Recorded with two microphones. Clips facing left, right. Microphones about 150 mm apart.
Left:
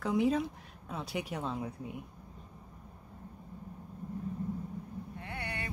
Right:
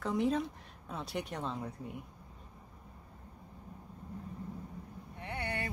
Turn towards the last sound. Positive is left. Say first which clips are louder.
# right 3 dB
turn(degrees=-30)  # may be behind; listen again after turning